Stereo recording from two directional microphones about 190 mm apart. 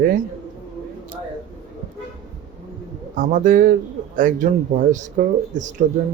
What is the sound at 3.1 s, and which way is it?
Speech, 45° right (ahead or behind).